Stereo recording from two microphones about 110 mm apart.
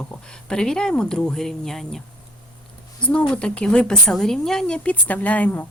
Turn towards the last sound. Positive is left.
turn(degrees=15)  # may be behind; listen again after turning